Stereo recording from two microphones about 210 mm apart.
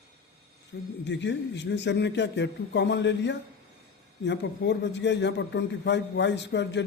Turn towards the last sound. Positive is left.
turn(degrees=55)  # may be behind; listen again after turning